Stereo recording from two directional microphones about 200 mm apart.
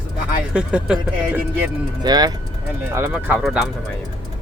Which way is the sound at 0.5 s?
5° right (ahead or behind).